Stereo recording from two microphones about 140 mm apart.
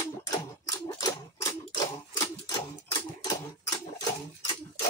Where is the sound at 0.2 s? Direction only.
25° left (ahead or behind).